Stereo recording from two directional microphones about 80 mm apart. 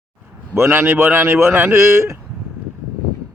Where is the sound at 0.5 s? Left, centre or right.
Right.